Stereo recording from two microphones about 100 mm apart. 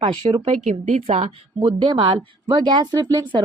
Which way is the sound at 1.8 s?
60° right (ahead or behind).